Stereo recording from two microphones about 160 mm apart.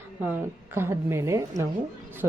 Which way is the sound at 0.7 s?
15° right (ahead or behind).